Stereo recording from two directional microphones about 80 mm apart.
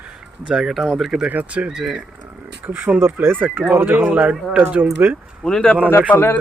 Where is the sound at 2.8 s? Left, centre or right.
Right.